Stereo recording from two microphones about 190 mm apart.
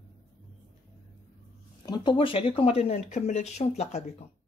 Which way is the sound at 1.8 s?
25° left (ahead or behind).